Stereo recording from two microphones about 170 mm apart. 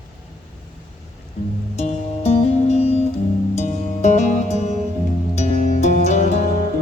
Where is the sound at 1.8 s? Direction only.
40° left (ahead or behind).